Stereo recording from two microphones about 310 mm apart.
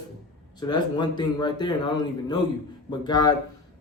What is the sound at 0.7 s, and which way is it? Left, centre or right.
Speech, centre.